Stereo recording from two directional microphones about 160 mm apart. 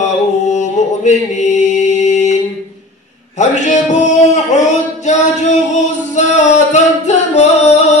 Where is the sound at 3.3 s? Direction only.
50° left (ahead or behind).